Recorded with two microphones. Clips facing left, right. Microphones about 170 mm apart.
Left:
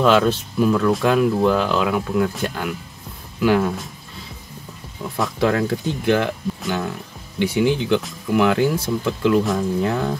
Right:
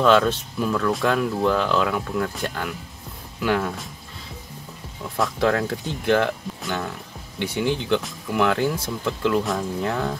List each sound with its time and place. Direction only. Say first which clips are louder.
0.0 s speech: left 1 dB; 5° left (ahead or behind)
5.2 s speech: left 2 dB; 5° left (ahead or behind)